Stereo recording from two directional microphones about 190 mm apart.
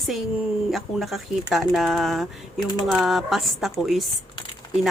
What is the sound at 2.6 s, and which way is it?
Speech, 20° left (ahead or behind).